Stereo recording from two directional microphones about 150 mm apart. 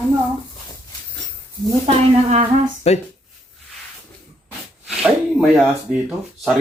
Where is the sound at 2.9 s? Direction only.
45° left (ahead or behind).